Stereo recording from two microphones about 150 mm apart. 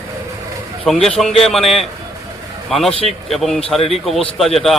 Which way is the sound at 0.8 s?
5° left (ahead or behind).